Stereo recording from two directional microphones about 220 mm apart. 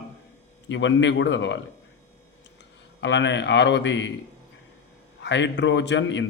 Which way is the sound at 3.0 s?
55° left (ahead or behind).